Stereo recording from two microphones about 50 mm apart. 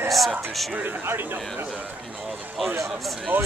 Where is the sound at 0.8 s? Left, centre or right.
Right.